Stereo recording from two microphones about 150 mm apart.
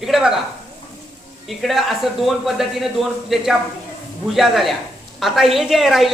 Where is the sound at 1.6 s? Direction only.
Centre (ahead or behind).